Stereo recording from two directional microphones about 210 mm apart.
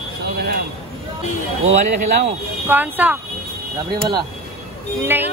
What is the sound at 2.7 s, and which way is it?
Speech, 10° right (ahead or behind).